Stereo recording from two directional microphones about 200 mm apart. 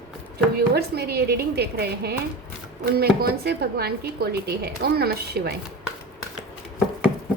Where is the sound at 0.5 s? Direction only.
50° right (ahead or behind).